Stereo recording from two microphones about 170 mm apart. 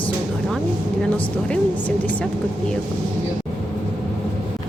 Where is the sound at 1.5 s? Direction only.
5° left (ahead or behind).